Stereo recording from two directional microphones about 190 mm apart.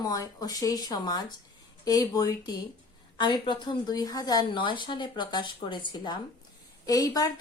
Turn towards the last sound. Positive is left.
turn(degrees=20)  # may be behind; listen again after turning